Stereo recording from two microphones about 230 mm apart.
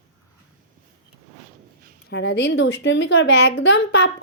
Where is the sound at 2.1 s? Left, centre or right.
Left.